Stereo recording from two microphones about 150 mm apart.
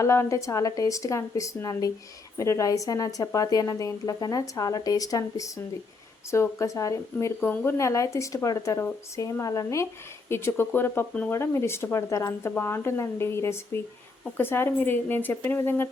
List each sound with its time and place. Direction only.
0.0 s speech: 20° left (ahead or behind)